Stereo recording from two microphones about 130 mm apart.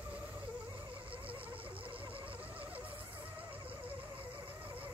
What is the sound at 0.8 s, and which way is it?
Insect, 40° right (ahead or behind).